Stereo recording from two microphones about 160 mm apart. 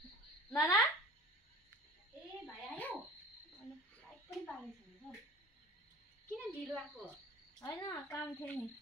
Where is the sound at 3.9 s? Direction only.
10° left (ahead or behind).